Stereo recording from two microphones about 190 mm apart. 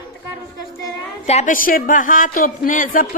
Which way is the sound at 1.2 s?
35° left (ahead or behind).